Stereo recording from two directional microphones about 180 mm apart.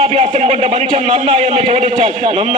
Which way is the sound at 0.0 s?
30° right (ahead or behind).